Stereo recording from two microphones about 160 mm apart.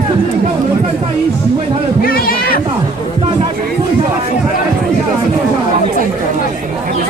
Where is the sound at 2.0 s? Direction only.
65° left (ahead or behind).